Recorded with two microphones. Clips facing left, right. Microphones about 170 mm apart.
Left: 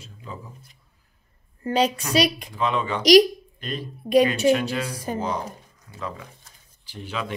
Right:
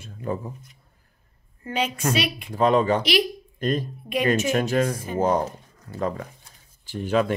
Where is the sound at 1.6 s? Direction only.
35° left (ahead or behind).